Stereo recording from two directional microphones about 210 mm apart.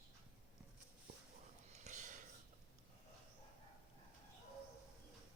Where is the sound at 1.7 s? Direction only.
35° right (ahead or behind).